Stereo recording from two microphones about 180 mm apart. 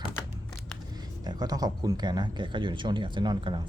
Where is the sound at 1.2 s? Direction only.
20° right (ahead or behind).